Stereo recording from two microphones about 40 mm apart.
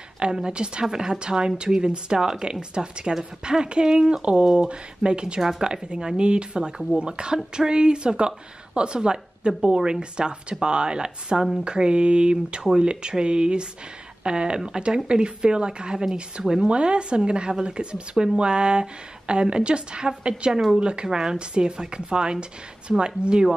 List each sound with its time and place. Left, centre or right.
0.2 s speech: right